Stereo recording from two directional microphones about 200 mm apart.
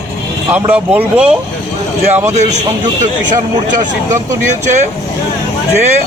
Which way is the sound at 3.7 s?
40° right (ahead or behind).